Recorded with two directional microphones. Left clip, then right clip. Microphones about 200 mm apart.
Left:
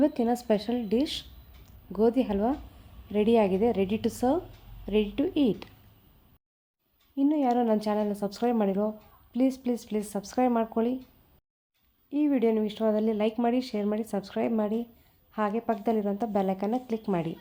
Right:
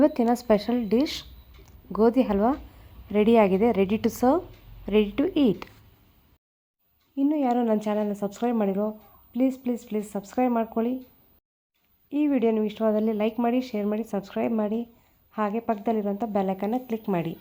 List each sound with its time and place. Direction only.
0.0 s speech: 15° right (ahead or behind)
7.2 s speech: 10° right (ahead or behind)
12.1 s speech: 10° right (ahead or behind)